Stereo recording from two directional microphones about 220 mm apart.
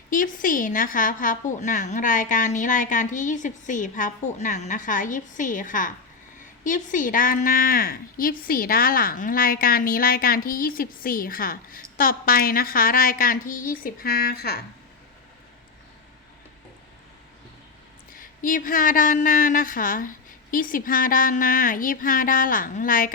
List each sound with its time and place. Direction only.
0.1 s a woman's voice: 40° left (ahead or behind)
18.2 s a woman's voice: 40° left (ahead or behind)